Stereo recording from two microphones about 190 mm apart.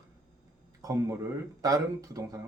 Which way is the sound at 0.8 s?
20° right (ahead or behind).